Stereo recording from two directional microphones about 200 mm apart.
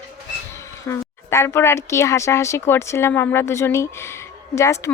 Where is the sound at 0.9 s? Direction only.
15° left (ahead or behind).